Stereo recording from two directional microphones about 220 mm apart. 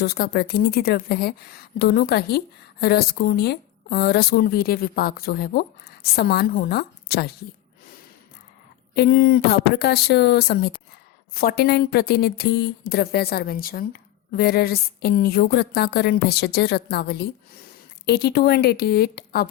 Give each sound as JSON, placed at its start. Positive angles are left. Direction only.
{"t": 0.0, "sound": "speech", "side_deg": 45}
{"t": 9.0, "sound": "speech", "side_deg": 45}